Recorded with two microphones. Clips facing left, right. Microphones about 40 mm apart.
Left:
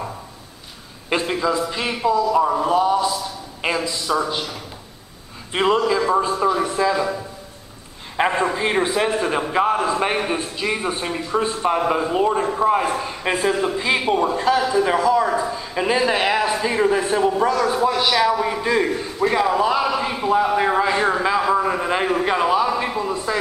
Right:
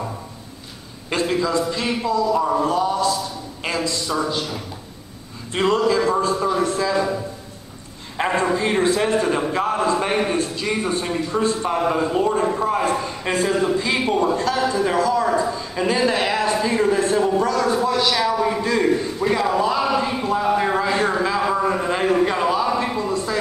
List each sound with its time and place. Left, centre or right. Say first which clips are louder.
1.1 s a man's voice: even; centre
2.2 s a man's voice: left 1 dB; centre
5.5 s a man's voice: even; centre
8.4 s a man's voice: even; centre
21.4 s a sound: left 1 dB; centre